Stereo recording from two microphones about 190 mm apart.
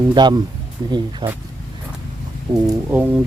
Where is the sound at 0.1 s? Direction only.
20° right (ahead or behind).